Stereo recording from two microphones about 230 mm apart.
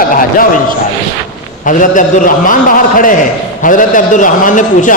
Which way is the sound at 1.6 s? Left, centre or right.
Left.